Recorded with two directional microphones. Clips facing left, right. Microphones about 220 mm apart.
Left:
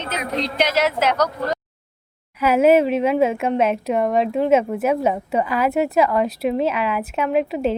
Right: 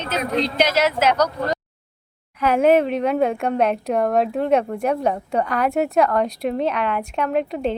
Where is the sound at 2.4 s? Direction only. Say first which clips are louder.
Left 1 dB; 5° left (ahead or behind).